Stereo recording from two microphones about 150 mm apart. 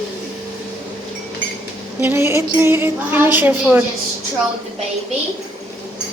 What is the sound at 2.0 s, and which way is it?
A woman's voice, 15° right (ahead or behind).